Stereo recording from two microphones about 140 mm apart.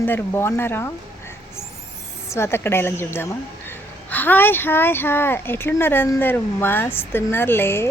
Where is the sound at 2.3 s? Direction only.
20° left (ahead or behind).